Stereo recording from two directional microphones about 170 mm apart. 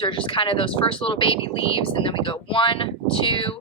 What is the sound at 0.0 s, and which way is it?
Speech, 30° left (ahead or behind).